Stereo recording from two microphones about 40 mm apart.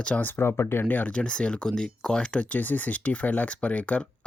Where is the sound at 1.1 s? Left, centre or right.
Left.